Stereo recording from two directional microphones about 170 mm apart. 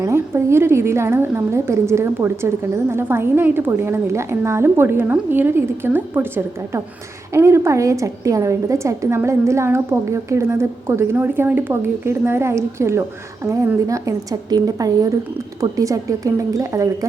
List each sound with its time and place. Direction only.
0.0 s a woman's voice: 15° right (ahead or behind)